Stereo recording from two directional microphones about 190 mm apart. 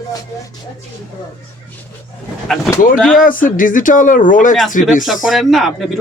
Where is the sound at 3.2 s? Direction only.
45° left (ahead or behind).